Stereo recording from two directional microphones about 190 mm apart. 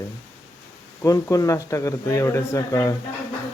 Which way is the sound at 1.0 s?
15° left (ahead or behind).